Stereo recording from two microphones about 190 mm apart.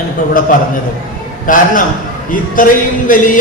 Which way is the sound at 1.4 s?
45° left (ahead or behind).